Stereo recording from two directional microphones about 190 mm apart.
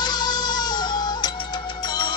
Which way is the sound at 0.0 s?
20° left (ahead or behind).